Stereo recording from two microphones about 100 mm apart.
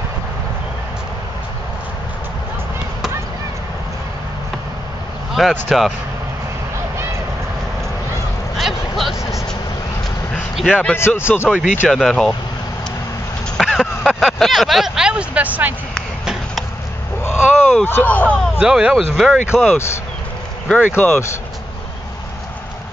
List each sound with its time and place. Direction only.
5.4 s speech: centre (ahead or behind)
8.5 s vehicle: centre (ahead or behind)
10.5 s a sound: centre (ahead or behind)
11.0 s speech: 25° left (ahead or behind)
11.4 s speech: 10° right (ahead or behind)
11.9 s speech: 5° left (ahead or behind)
13.6 s speech: 5° left (ahead or behind); by 15.7 s 15° right (ahead or behind)
17.2 s a sound: 25° left (ahead or behind)
17.8 s speech: 20° left (ahead or behind)
18.6 s speech: 5° right (ahead or behind)
19.5 s speech: 20° left (ahead or behind)